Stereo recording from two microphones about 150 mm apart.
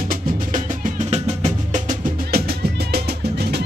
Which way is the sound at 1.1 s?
50° right (ahead or behind).